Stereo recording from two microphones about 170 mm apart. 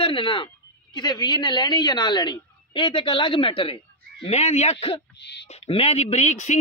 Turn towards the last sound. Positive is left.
turn(degrees=45)  # may be behind; listen again after turning